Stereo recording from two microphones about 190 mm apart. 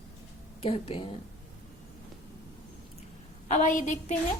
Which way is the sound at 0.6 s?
30° left (ahead or behind).